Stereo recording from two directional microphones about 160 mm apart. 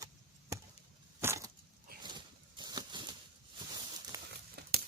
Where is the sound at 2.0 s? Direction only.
30° right (ahead or behind).